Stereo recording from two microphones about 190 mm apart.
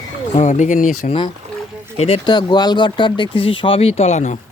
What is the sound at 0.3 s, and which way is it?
Speech, 40° left (ahead or behind).